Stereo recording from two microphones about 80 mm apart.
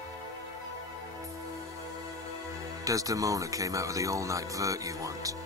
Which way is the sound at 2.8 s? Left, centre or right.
Right.